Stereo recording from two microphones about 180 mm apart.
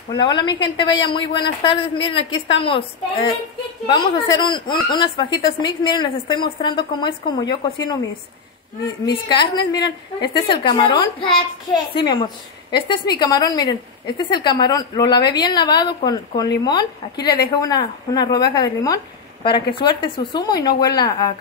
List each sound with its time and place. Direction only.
0.1 s a woman's voice: 25° left (ahead or behind)
9.0 s a woman's voice: 25° left (ahead or behind)
12.7 s a woman's voice: 25° left (ahead or behind)